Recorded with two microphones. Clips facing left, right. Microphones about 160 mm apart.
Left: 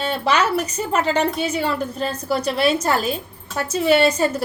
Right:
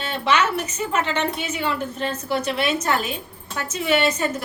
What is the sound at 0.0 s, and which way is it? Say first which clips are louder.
A woman's voice: left 2 dB; 35° left (ahead or behind).